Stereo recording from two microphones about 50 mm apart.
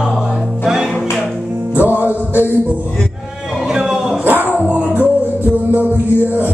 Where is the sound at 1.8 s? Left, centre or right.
Right.